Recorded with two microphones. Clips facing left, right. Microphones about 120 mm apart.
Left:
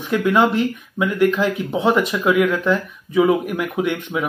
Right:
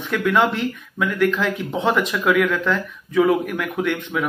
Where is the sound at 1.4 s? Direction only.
10° left (ahead or behind).